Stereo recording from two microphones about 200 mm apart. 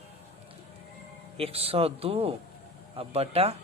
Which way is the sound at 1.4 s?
30° right (ahead or behind).